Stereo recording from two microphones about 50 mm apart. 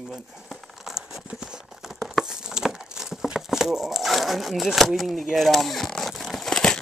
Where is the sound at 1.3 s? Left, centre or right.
Centre.